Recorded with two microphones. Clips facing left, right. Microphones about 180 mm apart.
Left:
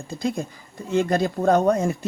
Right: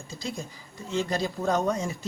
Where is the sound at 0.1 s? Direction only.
55° left (ahead or behind).